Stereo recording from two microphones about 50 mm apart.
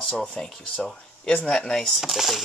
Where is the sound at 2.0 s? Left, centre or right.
Centre.